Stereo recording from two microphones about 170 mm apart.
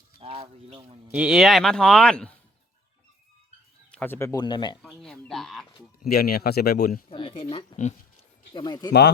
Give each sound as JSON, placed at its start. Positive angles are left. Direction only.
{"t": 0.2, "sound": "bird", "side_deg": -35}
{"t": 1.1, "sound": "speech", "side_deg": -5}
{"t": 3.9, "sound": "speech", "side_deg": 10}
{"t": 4.8, "sound": "speech", "side_deg": 0}
{"t": 6.0, "sound": "speech", "side_deg": 65}
{"t": 7.1, "sound": "speech", "side_deg": 30}
{"t": 8.9, "sound": "speech", "side_deg": 75}